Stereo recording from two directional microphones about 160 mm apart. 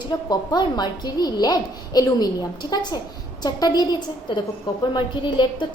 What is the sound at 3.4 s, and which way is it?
A woman's voice, 25° left (ahead or behind).